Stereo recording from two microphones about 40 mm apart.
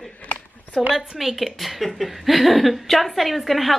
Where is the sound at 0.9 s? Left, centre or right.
Centre.